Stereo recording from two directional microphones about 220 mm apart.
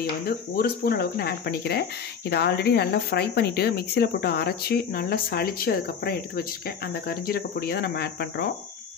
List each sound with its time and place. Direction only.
0.0 s speech: 45° left (ahead or behind)